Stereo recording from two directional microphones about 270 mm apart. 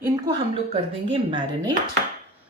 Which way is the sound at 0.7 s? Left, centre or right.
Centre.